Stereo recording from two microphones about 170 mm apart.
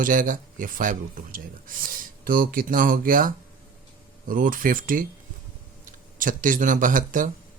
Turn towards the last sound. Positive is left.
turn(degrees=-50)  # may be behind; listen again after turning